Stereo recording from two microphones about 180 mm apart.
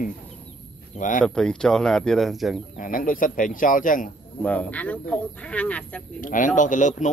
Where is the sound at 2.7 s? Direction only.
50° left (ahead or behind).